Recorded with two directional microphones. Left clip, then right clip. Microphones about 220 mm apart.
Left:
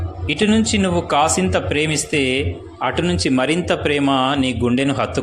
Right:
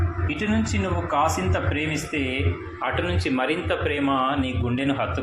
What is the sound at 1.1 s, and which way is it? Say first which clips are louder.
Speech: left 5 dB; 55° left (ahead or behind).